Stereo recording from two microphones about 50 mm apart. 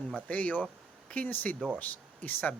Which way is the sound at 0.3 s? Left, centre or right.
Left.